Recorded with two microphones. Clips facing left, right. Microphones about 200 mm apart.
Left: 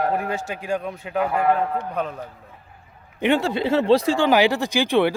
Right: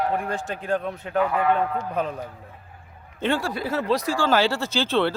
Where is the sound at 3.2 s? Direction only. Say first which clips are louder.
Left 5 dB; 20° left (ahead or behind).